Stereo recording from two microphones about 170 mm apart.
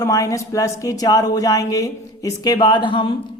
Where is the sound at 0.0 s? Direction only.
20° left (ahead or behind).